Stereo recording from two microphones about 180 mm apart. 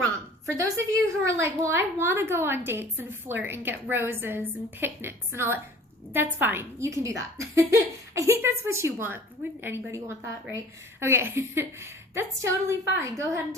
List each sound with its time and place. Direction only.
0.4 s a woman's voice: 15° right (ahead or behind)